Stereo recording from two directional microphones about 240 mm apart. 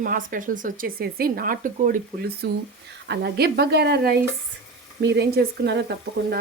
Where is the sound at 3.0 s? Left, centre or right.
Right.